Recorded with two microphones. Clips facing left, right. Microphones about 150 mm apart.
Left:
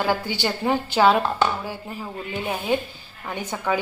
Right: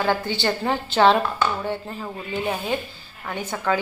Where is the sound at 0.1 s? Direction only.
10° left (ahead or behind).